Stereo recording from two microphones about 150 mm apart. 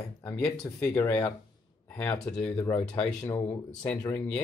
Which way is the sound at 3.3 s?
20° left (ahead or behind).